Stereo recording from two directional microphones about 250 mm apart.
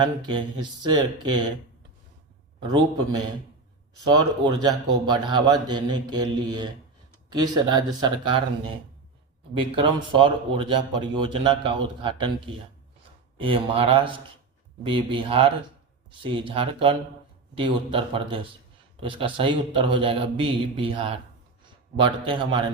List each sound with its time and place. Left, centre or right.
0.0 s mantra: centre
2.6 s mantra: centre
8.0 s a man's voice: centre
9.6 s a man's voice: centre